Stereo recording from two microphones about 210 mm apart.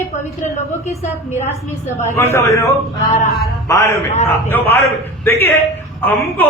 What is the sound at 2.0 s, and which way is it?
Speech, 10° left (ahead or behind).